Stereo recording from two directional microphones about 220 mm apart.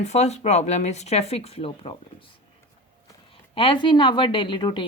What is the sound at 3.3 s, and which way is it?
Speech, 25° left (ahead or behind).